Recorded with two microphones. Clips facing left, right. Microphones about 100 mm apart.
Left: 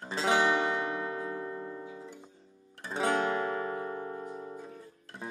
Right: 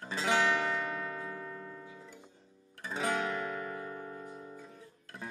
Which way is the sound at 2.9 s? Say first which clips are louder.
Left 4 dB; 30° left (ahead or behind).